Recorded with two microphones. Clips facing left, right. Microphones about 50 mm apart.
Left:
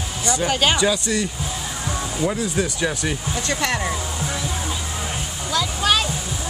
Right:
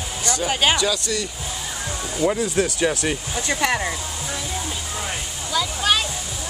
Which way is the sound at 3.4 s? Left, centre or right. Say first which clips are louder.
Right 2 dB; centre.